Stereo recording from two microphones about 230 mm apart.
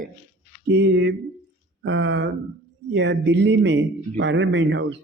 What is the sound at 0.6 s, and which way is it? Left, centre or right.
Speech, right.